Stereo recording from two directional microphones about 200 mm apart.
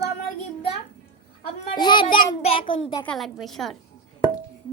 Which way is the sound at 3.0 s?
Centre (ahead or behind).